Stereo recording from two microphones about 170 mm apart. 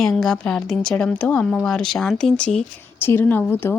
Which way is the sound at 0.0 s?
Centre (ahead or behind).